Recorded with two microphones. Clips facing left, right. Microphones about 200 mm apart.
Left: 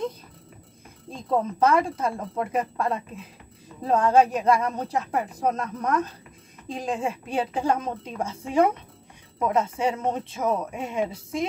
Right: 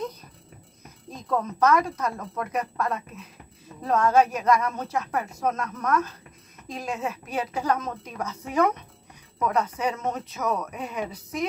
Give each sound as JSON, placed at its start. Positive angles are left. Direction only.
{"t": 1.1, "sound": "a woman's voice", "side_deg": 30}